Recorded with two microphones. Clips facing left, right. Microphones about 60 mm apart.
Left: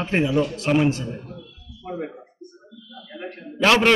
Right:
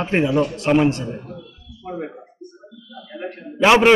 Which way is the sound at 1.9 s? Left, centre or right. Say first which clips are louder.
Right 2 dB; centre.